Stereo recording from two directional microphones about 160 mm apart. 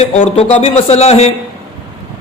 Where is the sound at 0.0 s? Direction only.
40° left (ahead or behind).